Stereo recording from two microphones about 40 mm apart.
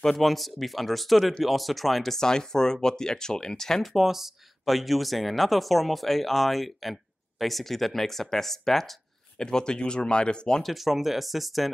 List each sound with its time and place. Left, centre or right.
0.0 s speech: centre
2.1 s speech: centre
3.9 s speech: centre; by 10.6 s left
10.6 s speech: centre